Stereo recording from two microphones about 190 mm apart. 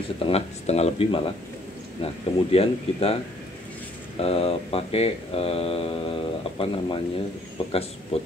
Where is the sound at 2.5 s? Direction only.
30° left (ahead or behind).